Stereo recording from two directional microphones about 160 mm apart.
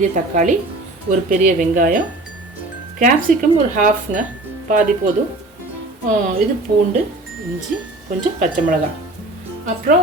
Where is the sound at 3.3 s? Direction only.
60° right (ahead or behind).